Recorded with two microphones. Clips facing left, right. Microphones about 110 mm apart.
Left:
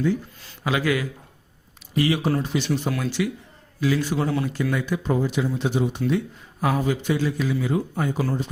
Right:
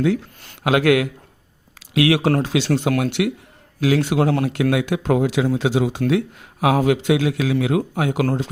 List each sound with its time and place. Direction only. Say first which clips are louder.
0.6 s speech: right 7 dB; 65° right (ahead or behind)